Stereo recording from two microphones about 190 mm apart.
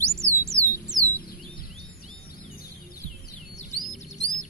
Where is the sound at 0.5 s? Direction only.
10° left (ahead or behind).